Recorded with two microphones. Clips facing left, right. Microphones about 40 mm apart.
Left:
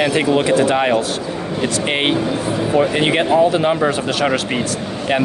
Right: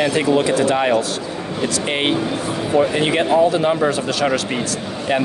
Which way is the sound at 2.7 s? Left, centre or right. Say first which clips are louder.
Even; left.